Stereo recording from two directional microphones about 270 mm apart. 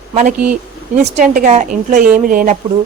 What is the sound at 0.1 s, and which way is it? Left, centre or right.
Speech, right.